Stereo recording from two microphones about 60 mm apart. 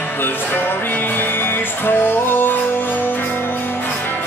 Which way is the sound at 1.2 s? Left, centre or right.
Left.